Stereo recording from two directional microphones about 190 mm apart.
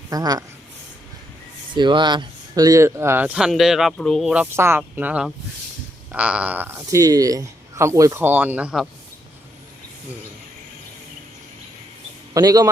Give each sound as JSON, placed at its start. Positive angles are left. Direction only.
{"t": 0.1, "sound": "speech", "side_deg": -20}
{"t": 1.7, "sound": "speech", "side_deg": -25}
{"t": 12.3, "sound": "speech", "side_deg": -20}